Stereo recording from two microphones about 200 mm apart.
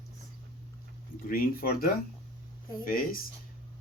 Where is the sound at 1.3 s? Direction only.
45° left (ahead or behind).